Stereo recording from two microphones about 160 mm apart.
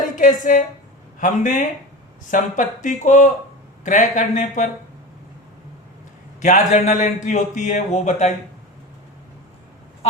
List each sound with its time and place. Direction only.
0.2 s a woman's voice: 55° left (ahead or behind)
6.4 s a man's voice: 50° left (ahead or behind)